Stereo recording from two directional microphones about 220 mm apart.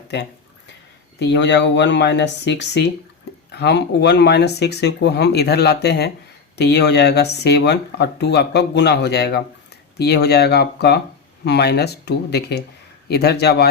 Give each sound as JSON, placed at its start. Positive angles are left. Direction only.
{"t": 1.2, "sound": "speech", "side_deg": 50}